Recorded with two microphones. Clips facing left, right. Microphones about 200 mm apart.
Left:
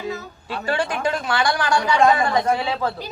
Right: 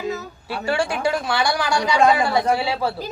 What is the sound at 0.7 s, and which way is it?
A woman's voice, 10° right (ahead or behind).